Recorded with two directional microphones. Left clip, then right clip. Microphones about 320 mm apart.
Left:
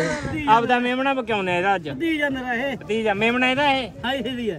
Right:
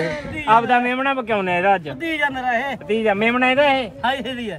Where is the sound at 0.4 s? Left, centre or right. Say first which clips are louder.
Right 3 dB; centre.